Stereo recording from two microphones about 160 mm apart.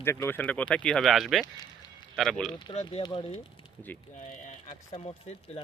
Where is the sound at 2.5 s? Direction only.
35° left (ahead or behind).